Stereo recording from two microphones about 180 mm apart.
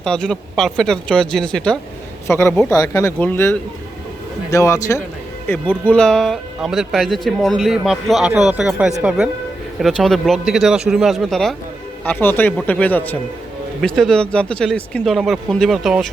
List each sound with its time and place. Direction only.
0.0 s speech: 5° left (ahead or behind)